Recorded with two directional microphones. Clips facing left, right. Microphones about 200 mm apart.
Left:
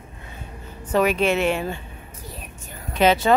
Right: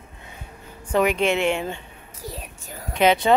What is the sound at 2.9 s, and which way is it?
Speech, 15° right (ahead or behind).